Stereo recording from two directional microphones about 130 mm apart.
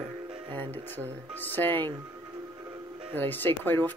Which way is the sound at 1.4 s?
15° left (ahead or behind).